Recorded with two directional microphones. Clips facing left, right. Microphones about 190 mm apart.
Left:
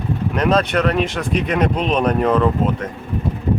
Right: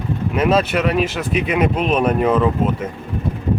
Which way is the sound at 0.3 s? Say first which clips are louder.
Right 1 dB; 5° right (ahead or behind).